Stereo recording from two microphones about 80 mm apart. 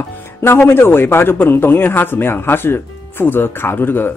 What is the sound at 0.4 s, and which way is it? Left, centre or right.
A man's voice, left.